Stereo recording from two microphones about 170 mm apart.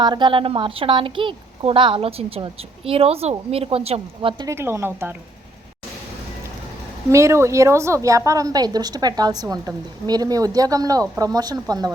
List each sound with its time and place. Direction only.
0.0 s a woman's voice: 25° right (ahead or behind)
4.4 s speech: 15° right (ahead or behind)
7.1 s a woman's voice: 15° right (ahead or behind)